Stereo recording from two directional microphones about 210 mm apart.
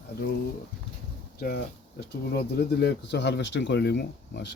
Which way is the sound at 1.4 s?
45° left (ahead or behind).